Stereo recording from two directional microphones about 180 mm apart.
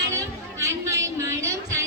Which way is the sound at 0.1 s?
15° right (ahead or behind).